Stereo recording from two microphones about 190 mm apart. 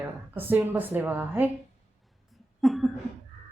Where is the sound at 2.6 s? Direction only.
Centre (ahead or behind).